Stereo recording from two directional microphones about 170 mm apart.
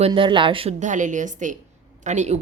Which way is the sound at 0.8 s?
45° right (ahead or behind).